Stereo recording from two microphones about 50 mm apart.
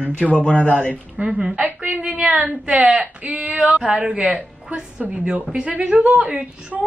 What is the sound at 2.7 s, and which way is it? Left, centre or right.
Speech, right.